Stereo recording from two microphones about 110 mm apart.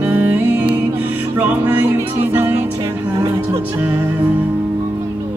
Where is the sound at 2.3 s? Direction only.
20° right (ahead or behind).